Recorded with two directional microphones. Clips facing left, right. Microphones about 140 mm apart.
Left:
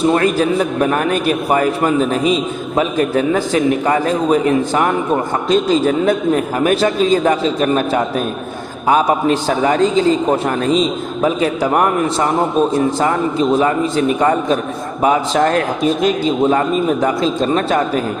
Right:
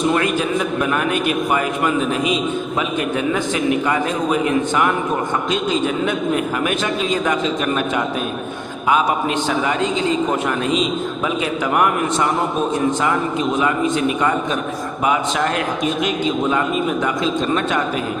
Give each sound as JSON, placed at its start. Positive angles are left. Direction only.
{"t": 0.0, "sound": "a man's voice", "side_deg": 35}